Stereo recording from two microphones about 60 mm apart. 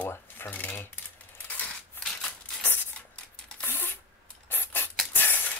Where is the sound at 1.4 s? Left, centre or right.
Left.